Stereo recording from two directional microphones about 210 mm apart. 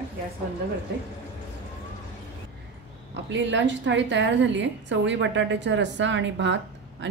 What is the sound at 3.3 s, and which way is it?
A woman's voice, 60° right (ahead or behind).